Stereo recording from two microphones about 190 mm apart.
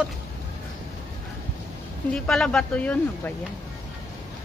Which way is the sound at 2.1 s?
5° left (ahead or behind).